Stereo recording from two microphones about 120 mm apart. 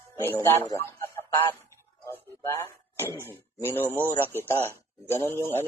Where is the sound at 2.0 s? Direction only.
20° left (ahead or behind).